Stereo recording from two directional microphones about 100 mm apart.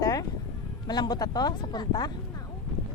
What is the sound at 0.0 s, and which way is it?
Sheep, 35° left (ahead or behind).